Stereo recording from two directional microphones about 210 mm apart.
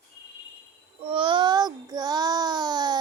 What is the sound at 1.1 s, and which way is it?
Child singing, 25° right (ahead or behind).